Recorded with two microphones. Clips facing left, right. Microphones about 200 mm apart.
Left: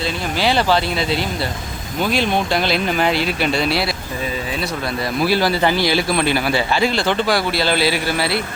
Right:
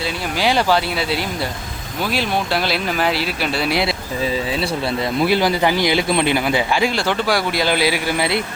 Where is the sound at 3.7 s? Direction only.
20° right (ahead or behind).